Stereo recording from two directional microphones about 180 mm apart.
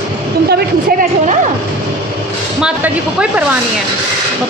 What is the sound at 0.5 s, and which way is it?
Speech, 65° right (ahead or behind).